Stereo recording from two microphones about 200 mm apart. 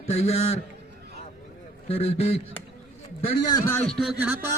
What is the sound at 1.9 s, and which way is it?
Speech, 30° left (ahead or behind).